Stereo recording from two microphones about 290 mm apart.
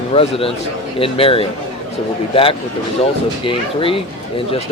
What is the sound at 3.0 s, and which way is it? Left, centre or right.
Speech, centre.